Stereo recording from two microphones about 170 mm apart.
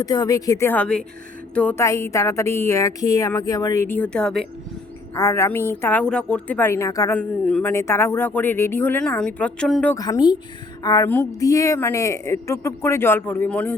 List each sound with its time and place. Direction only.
0.0 s a woman's voice: 20° left (ahead or behind); by 4.4 s 5° left (ahead or behind)
5.1 s a woman's voice: 15° left (ahead or behind)
7.2 s a woman's voice: 5° left (ahead or behind)
9.9 s a woman's voice: 20° left (ahead or behind)